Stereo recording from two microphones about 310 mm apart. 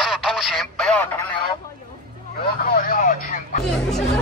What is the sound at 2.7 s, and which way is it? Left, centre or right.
Vehicle, left.